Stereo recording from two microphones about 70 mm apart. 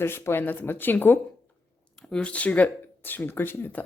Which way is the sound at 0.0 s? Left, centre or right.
Left.